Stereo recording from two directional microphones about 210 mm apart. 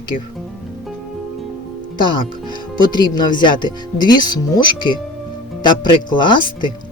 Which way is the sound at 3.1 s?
20° left (ahead or behind).